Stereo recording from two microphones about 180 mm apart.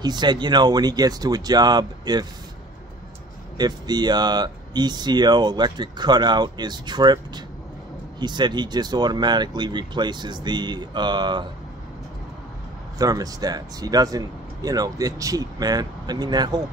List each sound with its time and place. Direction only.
0.0 s speech: 25° right (ahead or behind)
3.5 s speech: 25° right (ahead or behind)
13.0 s speech: 20° right (ahead or behind)